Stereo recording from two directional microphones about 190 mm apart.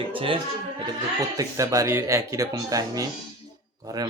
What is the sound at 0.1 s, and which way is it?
Speech, 30° right (ahead or behind).